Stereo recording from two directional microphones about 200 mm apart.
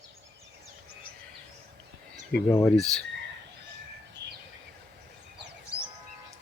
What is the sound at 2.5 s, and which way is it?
Speech, 15° left (ahead or behind).